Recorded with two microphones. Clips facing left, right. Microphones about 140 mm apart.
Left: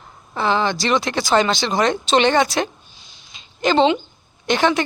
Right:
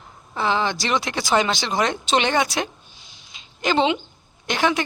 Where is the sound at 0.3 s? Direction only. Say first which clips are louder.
Left 3 dB; 15° right (ahead or behind).